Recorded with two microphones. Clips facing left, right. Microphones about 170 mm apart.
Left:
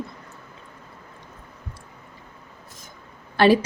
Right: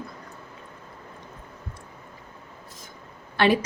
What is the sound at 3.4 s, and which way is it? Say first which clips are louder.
Speech: left 5 dB; 40° left (ahead or behind).